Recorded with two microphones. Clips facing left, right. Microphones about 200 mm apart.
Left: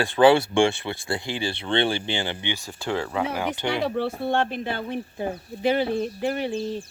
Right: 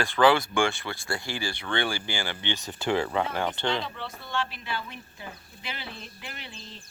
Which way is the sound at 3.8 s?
60° left (ahead or behind).